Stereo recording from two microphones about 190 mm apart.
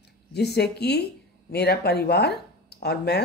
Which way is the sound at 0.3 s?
60° left (ahead or behind).